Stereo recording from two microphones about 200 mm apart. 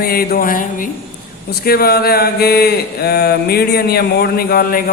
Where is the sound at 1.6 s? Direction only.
50° left (ahead or behind).